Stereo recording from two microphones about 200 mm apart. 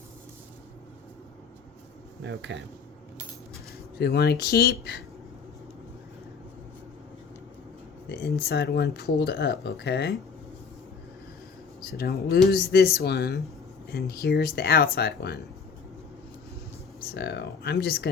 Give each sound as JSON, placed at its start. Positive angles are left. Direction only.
{"t": 2.2, "sound": "speech", "side_deg": -65}
{"t": 4.0, "sound": "speech", "side_deg": 55}
{"t": 8.4, "sound": "speech", "side_deg": 55}
{"t": 11.9, "sound": "speech", "side_deg": 50}
{"t": 17.2, "sound": "speech", "side_deg": 55}